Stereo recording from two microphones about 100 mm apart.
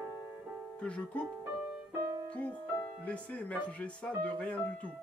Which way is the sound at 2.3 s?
15° left (ahead or behind).